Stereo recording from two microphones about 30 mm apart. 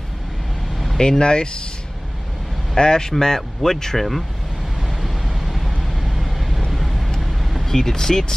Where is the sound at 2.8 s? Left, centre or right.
Left.